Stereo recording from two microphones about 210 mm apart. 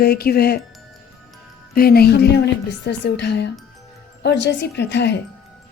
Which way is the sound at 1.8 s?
45° left (ahead or behind).